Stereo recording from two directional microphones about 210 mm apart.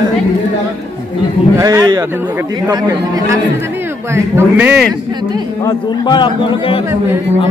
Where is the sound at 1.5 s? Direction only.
15° right (ahead or behind).